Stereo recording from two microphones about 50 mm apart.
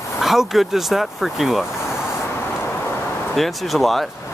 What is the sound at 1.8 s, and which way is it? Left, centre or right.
Vehicle, left.